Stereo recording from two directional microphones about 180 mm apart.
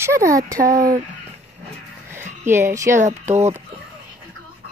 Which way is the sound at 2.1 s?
15° right (ahead or behind).